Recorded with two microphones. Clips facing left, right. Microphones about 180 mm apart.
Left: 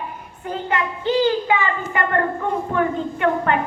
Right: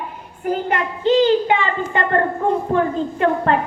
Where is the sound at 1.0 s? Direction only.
30° right (ahead or behind).